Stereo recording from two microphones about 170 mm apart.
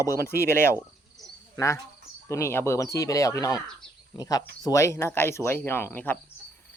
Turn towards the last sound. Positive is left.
turn(degrees=10)  # may be behind; listen again after turning